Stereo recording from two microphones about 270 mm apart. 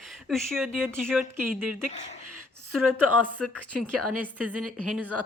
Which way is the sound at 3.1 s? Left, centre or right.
Right.